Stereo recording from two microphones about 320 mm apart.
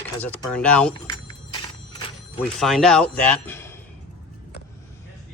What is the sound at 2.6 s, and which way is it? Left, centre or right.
Speech, centre.